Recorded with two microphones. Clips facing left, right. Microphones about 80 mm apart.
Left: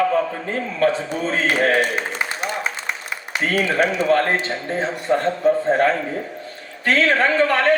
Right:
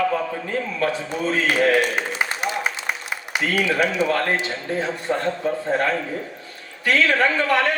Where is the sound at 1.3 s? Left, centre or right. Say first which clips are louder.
Even; left.